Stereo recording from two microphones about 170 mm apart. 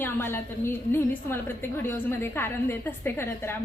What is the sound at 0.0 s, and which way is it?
A woman's voice, 10° left (ahead or behind).